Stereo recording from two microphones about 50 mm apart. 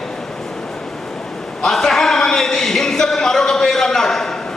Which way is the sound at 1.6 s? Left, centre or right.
Centre.